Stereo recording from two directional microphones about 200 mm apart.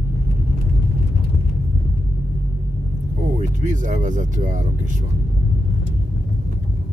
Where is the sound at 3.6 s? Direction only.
40° right (ahead or behind).